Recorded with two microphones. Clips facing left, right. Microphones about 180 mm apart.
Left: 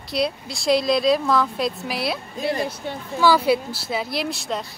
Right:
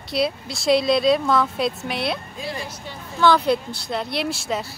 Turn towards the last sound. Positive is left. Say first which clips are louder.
# right 1 dB
turn(degrees=-5)  # may be behind; listen again after turning